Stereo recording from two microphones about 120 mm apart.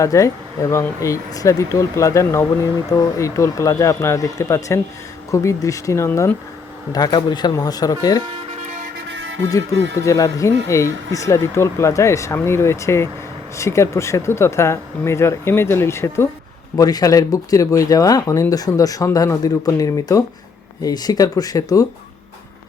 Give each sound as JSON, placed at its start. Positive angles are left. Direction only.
{"t": 0.0, "sound": "speech", "side_deg": 25}
{"t": 6.9, "sound": "speech", "side_deg": 35}
{"t": 10.3, "sound": "speech", "side_deg": 25}